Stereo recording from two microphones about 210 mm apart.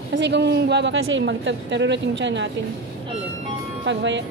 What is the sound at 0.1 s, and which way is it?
A woman's voice, 55° right (ahead or behind).